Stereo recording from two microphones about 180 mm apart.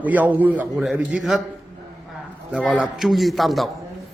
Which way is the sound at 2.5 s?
5° right (ahead or behind).